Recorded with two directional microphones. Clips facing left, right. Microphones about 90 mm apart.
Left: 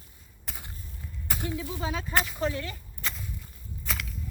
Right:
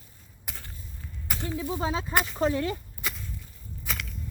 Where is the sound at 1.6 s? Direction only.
30° right (ahead or behind).